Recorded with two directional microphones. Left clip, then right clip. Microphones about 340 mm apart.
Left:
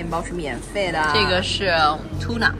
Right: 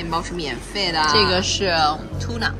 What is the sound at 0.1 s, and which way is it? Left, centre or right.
Speech, centre.